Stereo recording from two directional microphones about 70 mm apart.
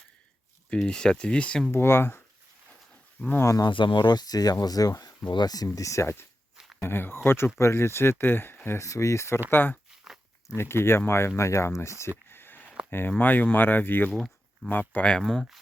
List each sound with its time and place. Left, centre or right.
0.7 s speech: centre
1.7 s speech: left
3.2 s speech: left
3.6 s speech: left
5.7 s speech: left
8.8 s speech: left
9.5 s speech: left
14.1 s a sound: centre
14.7 s speech: left
15.2 s speech: centre